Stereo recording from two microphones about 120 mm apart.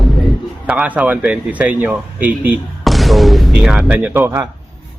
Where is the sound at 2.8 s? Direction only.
Centre (ahead or behind); by 4.4 s 20° right (ahead or behind).